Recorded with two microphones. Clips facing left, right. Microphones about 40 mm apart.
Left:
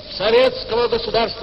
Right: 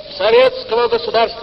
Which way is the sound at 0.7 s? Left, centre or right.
Centre.